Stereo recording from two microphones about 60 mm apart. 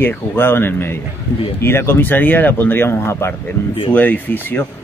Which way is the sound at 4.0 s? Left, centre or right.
Left.